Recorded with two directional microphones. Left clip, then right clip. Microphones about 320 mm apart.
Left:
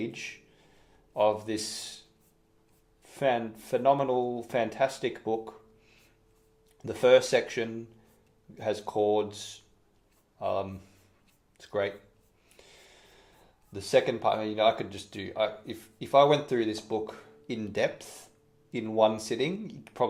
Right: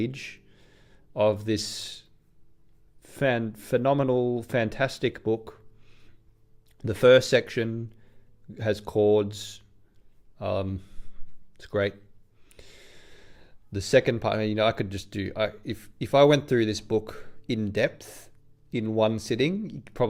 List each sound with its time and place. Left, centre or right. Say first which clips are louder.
0.0 s speech: right 4 dB; right
3.2 s speech: right 2 dB; right
6.7 s speech: right 4 dB; right
12.5 s a sound: right 3 dB; right
13.7 s speech: right 3 dB; right